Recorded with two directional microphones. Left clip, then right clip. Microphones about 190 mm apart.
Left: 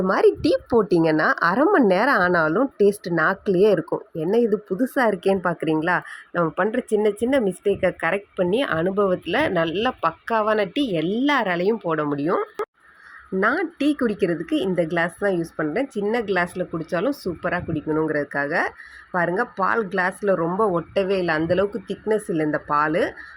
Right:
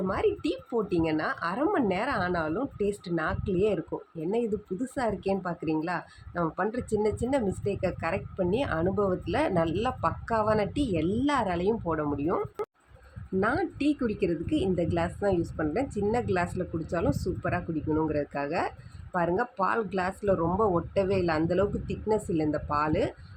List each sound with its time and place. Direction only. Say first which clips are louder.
0.1 s a woman's voice: left 12 dB; 40° left (ahead or behind)
4.9 s speech: left 9 dB; 35° left (ahead or behind); by 12.4 s 20° left (ahead or behind)
12.6 s honk: left 6 dB; centre (ahead or behind)
13.4 s speech: left 7 dB; 15° left (ahead or behind)